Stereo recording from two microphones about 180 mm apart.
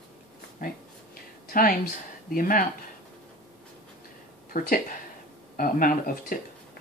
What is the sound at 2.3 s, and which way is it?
Speech, 50° left (ahead or behind).